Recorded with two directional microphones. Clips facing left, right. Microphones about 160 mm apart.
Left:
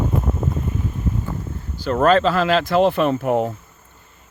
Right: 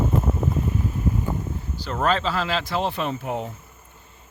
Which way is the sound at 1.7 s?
50° left (ahead or behind).